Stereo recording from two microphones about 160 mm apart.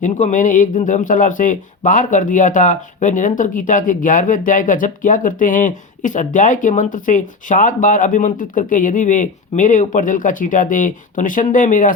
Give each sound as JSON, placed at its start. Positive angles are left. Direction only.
{"t": 0.0, "sound": "speech", "side_deg": 50}